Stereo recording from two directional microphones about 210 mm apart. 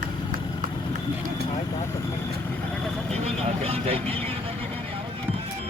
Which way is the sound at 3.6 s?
30° right (ahead or behind).